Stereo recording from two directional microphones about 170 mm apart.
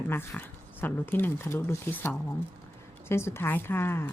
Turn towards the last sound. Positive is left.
turn(degrees=15)  # may be behind; listen again after turning